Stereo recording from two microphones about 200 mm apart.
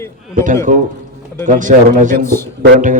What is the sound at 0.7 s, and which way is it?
Speech, 40° right (ahead or behind).